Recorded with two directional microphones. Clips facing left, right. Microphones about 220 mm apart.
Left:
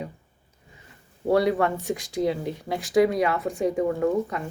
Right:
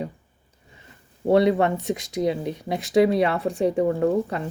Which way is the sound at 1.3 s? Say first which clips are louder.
Right 3 dB; 25° right (ahead or behind).